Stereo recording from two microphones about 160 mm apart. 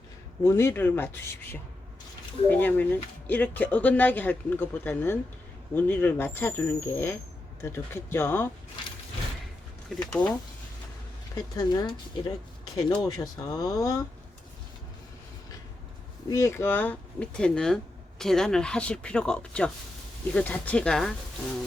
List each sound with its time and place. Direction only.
0.4 s speech: 15° left (ahead or behind)
2.5 s speech: 10° left (ahead or behind)
9.9 s speech: 5° left (ahead or behind)
11.3 s speech: 25° left (ahead or behind)
16.3 s speech: 15° left (ahead or behind)